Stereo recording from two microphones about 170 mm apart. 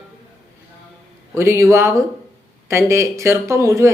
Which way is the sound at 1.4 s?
15° right (ahead or behind).